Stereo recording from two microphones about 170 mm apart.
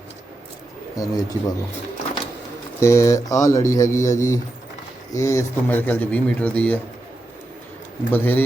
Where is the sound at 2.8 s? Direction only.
15° left (ahead or behind).